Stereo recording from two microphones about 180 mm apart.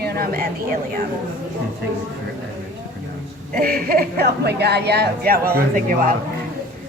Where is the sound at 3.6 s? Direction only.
55° right (ahead or behind).